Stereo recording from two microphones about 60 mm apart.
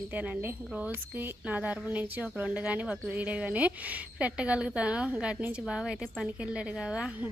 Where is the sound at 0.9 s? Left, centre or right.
Right.